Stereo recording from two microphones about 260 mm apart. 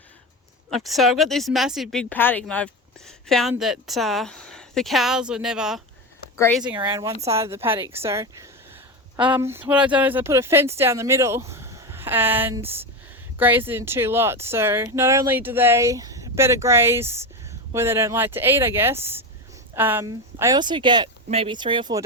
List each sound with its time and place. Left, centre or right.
0.7 s speech: centre
6.7 s speech: centre